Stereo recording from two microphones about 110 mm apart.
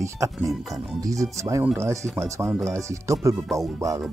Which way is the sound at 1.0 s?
30° right (ahead or behind).